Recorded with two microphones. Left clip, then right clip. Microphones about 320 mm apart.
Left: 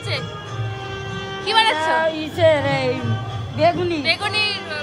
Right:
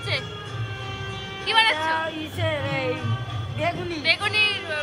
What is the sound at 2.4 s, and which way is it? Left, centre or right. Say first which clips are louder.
Speech: left 10 dB; left.